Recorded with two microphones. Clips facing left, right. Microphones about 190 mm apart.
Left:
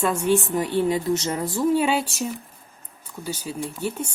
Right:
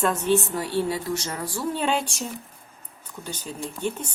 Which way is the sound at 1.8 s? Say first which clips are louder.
Left 3 dB; 5° left (ahead or behind).